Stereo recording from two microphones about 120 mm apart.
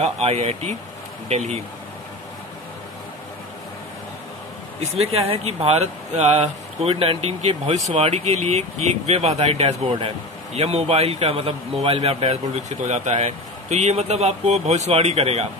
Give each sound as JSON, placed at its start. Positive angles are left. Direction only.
{"t": 0.0, "sound": "speech", "side_deg": -60}
{"t": 4.7, "sound": "speech", "side_deg": -55}